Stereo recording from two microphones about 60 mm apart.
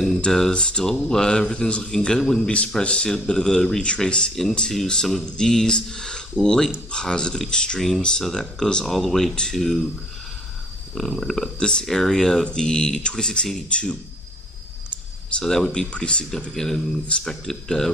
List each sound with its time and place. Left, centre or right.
0.0 s speech: centre
11.0 s speech: centre
15.2 s speech: centre